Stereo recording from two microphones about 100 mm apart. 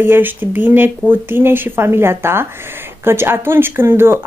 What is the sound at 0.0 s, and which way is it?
Speech, 20° right (ahead or behind).